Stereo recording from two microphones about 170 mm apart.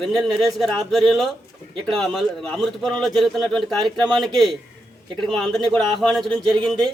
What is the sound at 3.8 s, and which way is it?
Speech, 25° right (ahead or behind).